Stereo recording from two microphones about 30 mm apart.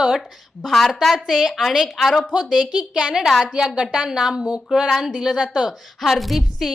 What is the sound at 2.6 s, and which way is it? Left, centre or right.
Speech, right.